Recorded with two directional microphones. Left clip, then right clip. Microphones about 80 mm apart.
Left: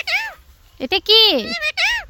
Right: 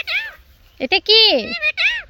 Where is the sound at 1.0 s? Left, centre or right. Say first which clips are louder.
Even; left.